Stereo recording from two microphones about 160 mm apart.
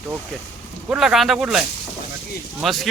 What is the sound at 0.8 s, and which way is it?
Speech, 5° right (ahead or behind).